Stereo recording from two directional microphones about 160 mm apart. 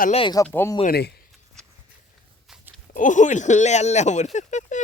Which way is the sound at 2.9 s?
50° left (ahead or behind).